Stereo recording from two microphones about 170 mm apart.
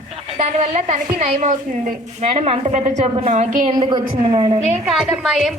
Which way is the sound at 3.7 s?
25° right (ahead or behind).